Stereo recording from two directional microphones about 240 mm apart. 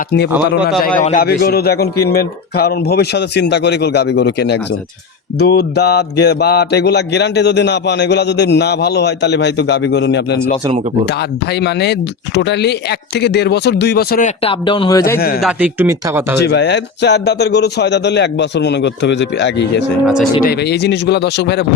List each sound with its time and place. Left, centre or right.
0.9 s a man's voice: left
2.0 s mantra: left
11.6 s mantra: left; by 15.2 s centre
15.4 s a man's voice: centre
16.4 s mantra: left